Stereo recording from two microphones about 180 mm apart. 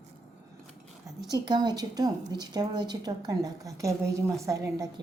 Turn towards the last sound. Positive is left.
turn(degrees=-20)  # may be behind; listen again after turning